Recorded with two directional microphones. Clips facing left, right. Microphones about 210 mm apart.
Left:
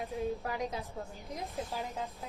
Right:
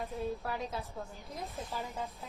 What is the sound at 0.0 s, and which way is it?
A woman's voice, 15° left (ahead or behind).